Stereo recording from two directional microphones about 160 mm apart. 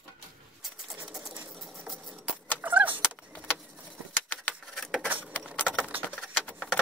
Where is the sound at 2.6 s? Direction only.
10° right (ahead or behind).